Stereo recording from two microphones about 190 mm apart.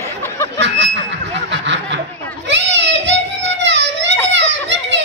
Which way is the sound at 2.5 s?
70° right (ahead or behind).